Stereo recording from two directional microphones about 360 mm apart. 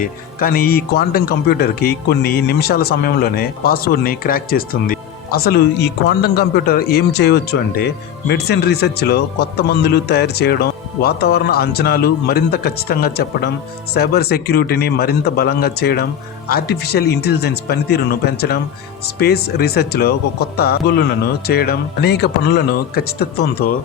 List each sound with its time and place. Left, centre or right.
0.0 s speech: left